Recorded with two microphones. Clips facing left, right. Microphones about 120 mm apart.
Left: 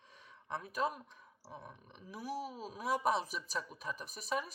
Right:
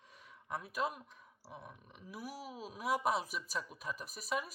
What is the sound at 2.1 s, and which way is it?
Speech, 40° left (ahead or behind).